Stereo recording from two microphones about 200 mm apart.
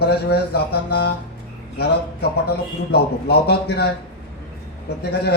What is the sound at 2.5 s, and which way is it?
A man's voice, 50° left (ahead or behind).